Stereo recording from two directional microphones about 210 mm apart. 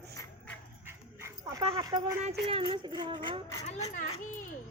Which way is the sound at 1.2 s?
15° right (ahead or behind).